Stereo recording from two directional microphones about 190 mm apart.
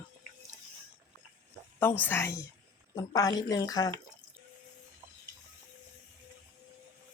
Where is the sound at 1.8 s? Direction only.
10° left (ahead or behind).